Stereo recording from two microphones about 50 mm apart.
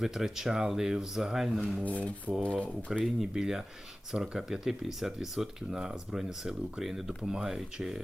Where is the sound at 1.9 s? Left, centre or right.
Left.